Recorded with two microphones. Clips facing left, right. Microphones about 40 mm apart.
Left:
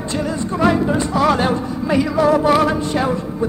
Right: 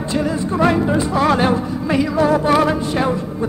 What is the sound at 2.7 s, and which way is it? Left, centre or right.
Music, centre.